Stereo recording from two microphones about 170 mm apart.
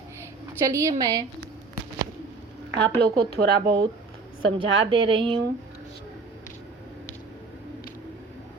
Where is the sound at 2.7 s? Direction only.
80° right.